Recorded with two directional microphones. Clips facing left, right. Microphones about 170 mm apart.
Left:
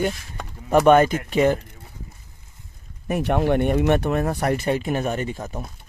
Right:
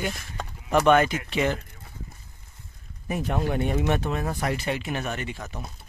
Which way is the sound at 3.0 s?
65° left (ahead or behind).